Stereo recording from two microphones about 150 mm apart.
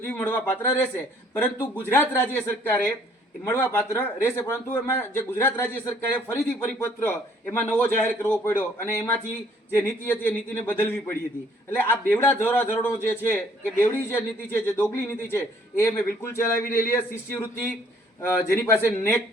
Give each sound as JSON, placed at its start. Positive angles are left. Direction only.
{"t": 0.0, "sound": "speech", "side_deg": 15}